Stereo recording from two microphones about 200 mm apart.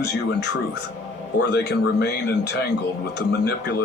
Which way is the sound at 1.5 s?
55° left (ahead or behind).